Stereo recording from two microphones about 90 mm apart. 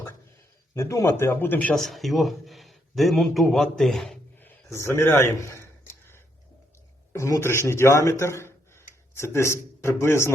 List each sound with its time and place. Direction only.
0.7 s speech: 30° left (ahead or behind)
1.7 s speech: centre (ahead or behind)
4.4 s a man's voice: 25° left (ahead or behind)
7.1 s a man's voice: 35° left (ahead or behind)